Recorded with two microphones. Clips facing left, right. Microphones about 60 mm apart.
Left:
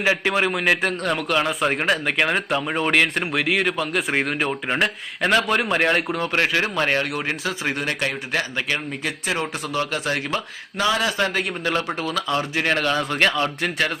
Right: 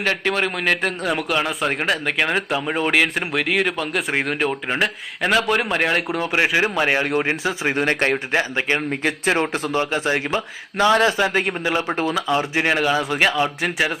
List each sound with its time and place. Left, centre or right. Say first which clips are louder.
0.0 s a man's voice: left 1 dB; centre
7.1 s speech: right 5 dB; right
7.9 s speech: right 5 dB; right
8.3 s speech: right 4 dB; right
8.9 s speech: right 6 dB; right
11.2 s a man's voice: right 3 dB; centre